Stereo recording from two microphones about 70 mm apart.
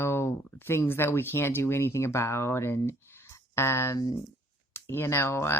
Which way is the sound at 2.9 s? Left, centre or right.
Left.